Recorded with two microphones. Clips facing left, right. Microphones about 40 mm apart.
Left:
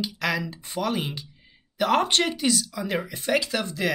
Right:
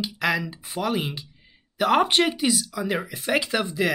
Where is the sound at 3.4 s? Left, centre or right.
Centre.